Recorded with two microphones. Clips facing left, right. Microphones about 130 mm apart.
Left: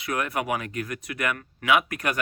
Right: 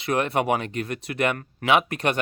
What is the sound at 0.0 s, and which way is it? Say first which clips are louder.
Speech: right 5 dB; 30° right (ahead or behind).